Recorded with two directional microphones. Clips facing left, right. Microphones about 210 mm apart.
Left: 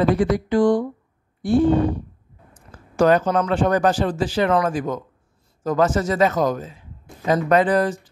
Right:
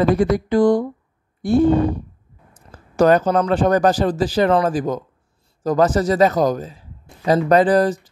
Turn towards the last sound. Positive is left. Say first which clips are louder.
# right 3 dB
turn(degrees=-35)  # may be behind; listen again after turning